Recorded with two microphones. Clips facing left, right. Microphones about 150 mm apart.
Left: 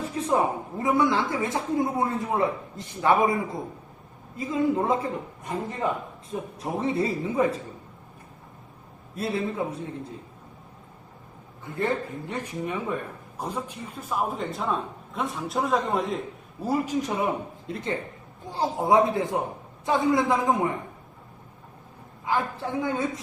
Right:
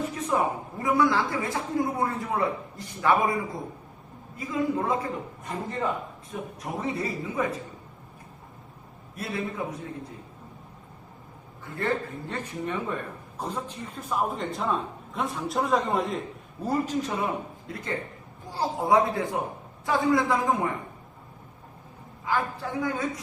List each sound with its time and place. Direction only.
0.0 s speech: 30° left (ahead or behind)
6.6 s speech: 30° left (ahead or behind)
9.1 s speech: 25° left (ahead or behind)
11.6 s speech: 20° left (ahead or behind); by 16.2 s centre (ahead or behind)
16.6 s speech: 10° left (ahead or behind)
22.3 s speech: 20° left (ahead or behind)